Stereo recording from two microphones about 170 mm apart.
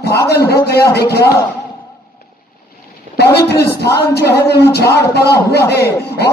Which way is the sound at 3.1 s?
70° left (ahead or behind).